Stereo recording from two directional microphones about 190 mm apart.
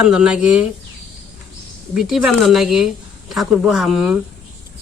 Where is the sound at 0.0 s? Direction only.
5° right (ahead or behind).